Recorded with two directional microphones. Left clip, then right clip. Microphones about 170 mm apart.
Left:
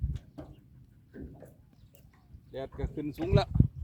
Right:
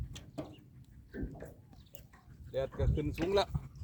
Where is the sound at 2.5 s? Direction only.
5° left (ahead or behind).